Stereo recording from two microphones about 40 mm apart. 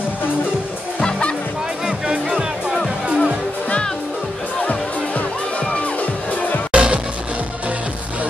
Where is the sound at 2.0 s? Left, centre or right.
Right.